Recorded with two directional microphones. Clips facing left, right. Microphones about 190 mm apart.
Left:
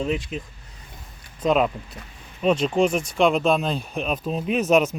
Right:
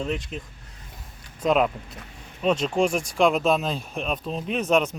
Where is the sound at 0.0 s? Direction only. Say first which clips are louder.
Left 3 dB; 5° left (ahead or behind).